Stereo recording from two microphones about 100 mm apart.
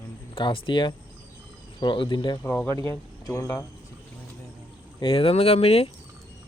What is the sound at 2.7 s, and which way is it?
Speech, 35° left (ahead or behind).